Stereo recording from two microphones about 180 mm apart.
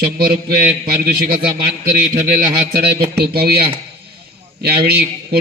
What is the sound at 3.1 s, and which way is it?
A man's voice, 60° right (ahead or behind).